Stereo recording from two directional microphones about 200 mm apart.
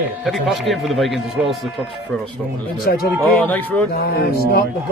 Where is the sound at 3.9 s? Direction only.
50° left (ahead or behind).